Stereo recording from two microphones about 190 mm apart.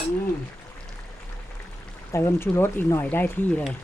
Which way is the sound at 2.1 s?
15° left (ahead or behind).